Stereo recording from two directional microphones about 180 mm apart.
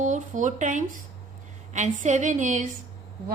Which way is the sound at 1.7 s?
40° right (ahead or behind).